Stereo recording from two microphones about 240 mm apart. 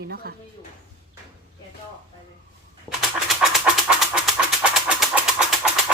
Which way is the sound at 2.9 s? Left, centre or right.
Centre.